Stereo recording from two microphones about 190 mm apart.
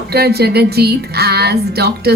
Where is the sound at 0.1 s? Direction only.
55° right (ahead or behind).